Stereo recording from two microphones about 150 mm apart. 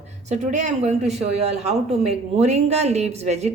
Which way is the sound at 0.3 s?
55° right (ahead or behind).